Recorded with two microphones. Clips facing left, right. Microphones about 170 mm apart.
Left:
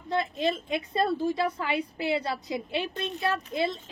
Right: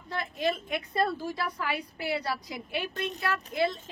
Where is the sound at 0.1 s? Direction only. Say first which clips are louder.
Left 3 dB; 25° left (ahead or behind).